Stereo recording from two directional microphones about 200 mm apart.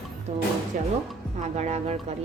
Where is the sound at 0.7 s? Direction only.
40° right (ahead or behind).